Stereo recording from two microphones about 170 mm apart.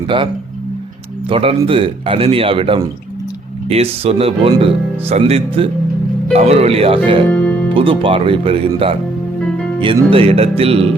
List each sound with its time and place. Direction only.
1.3 s speech: 30° right (ahead or behind)
7.3 s music: 5° left (ahead or behind)
7.7 s speech: 30° right (ahead or behind)